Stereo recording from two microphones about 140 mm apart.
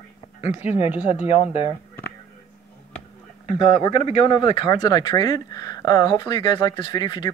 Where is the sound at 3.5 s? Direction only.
35° left (ahead or behind).